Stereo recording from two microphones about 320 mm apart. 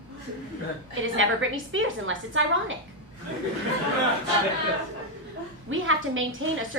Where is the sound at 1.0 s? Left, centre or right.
Right.